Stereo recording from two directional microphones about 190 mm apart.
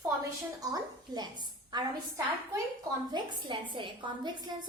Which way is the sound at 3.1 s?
25° right (ahead or behind).